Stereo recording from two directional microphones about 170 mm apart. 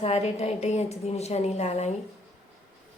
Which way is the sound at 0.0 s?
40° left (ahead or behind).